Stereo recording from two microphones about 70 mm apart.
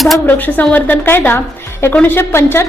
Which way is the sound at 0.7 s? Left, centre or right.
Left.